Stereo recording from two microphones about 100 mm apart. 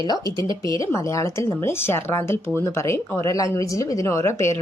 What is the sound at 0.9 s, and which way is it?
Speech, 30° left (ahead or behind).